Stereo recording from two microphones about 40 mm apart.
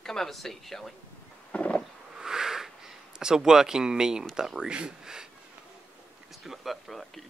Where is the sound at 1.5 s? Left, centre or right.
Left.